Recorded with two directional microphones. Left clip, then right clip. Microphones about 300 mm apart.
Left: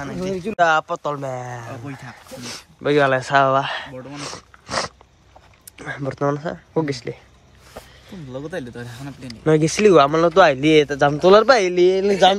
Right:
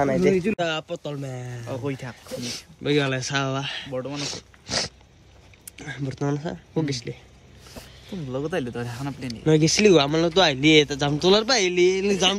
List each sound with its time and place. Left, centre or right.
0.6 s speech: centre
1.1 s speech: left
1.5 s speech: centre